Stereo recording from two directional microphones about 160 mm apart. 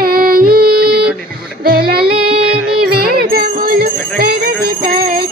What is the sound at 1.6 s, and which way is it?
Female singing, 70° right (ahead or behind).